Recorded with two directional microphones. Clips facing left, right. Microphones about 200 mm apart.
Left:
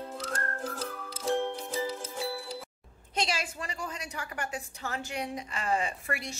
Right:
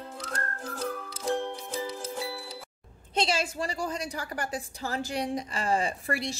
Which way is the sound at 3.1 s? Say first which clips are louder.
Right 4 dB; 25° right (ahead or behind).